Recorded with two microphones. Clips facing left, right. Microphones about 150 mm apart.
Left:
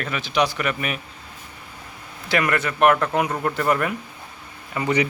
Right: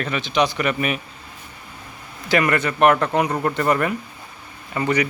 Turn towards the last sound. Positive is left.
turn(degrees=5)  # may be behind; listen again after turning